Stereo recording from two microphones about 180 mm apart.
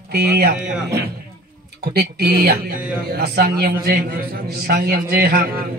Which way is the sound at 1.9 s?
60° right (ahead or behind).